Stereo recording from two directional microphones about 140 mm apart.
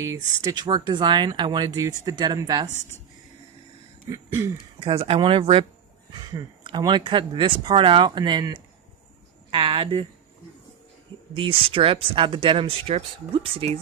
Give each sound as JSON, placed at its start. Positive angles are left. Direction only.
{"t": 0.0, "sound": "speech", "side_deg": -25}
{"t": 4.7, "sound": "speech", "side_deg": -40}
{"t": 11.3, "sound": "speech", "side_deg": -40}